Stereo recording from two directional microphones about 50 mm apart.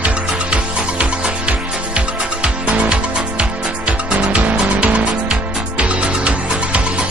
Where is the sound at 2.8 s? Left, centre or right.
Right.